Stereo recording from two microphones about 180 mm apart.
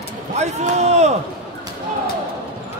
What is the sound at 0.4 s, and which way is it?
Speech, 40° right (ahead or behind).